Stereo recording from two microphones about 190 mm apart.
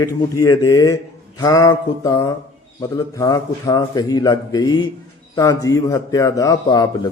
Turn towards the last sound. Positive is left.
turn(degrees=20)  # may be behind; listen again after turning